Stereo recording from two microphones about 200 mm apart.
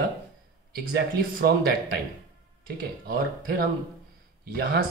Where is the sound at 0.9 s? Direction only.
50° right (ahead or behind).